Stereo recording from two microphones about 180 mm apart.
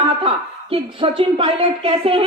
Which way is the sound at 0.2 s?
30° right (ahead or behind).